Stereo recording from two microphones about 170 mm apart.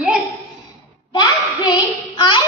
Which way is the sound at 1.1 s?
25° left (ahead or behind).